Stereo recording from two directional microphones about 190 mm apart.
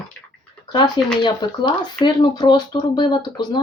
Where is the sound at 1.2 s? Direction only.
25° left (ahead or behind).